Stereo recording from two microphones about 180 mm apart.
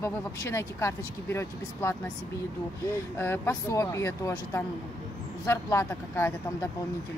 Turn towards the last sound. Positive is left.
turn(degrees=15)  # may be behind; listen again after turning